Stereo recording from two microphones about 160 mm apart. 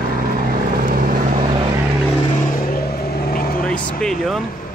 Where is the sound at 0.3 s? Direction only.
65° right (ahead or behind).